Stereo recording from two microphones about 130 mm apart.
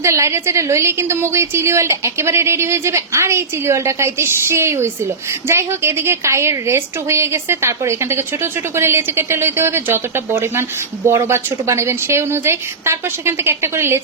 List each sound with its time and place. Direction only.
0.0 s a woman's voice: 20° right (ahead or behind)